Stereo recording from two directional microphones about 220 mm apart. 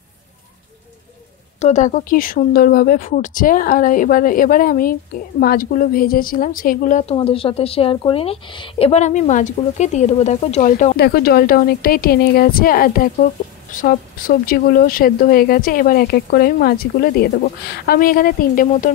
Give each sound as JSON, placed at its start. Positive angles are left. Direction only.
{"t": 1.6, "sound": "a woman's voice", "side_deg": 35}
{"t": 11.0, "sound": "speech", "side_deg": 45}